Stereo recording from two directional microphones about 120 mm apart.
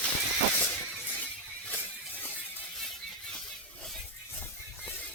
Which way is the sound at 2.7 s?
Centre (ahead or behind).